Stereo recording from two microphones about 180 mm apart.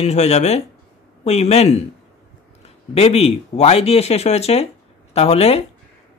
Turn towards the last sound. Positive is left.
turn(degrees=35)  # may be behind; listen again after turning